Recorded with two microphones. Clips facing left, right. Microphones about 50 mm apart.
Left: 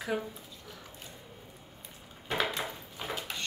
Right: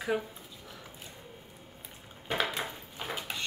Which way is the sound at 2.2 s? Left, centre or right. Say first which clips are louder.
Even; centre.